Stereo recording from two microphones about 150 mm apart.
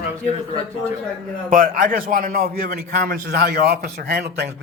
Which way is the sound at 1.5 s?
65° right (ahead or behind).